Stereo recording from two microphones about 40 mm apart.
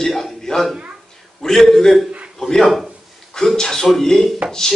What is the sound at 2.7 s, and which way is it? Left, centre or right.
Speech, centre.